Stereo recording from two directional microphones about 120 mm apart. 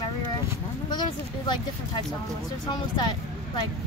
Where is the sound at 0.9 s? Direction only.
40° left (ahead or behind).